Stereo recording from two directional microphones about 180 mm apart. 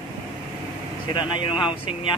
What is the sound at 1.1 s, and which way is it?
Speech, 25° left (ahead or behind).